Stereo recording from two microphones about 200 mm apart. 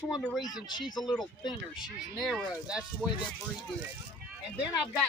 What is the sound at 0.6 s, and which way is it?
Speech, 20° left (ahead or behind).